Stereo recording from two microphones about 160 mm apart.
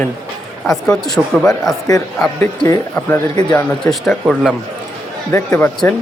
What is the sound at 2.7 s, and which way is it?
Speech, 15° left (ahead or behind).